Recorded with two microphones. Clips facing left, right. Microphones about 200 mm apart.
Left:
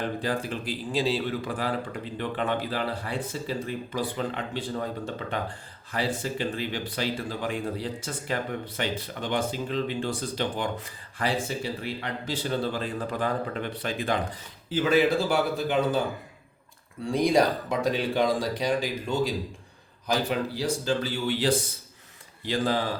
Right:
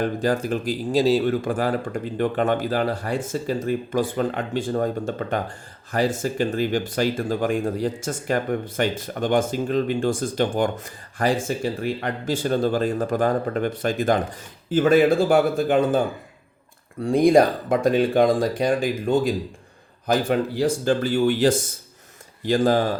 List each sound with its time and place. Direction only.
0.0 s speech: 45° right (ahead or behind)
17.1 s speech: 50° right (ahead or behind)